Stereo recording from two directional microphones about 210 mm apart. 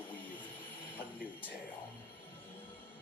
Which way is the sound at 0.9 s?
10° left (ahead or behind).